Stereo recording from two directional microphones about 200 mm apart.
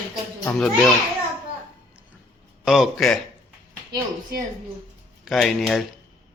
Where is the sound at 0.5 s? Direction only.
Centre (ahead or behind).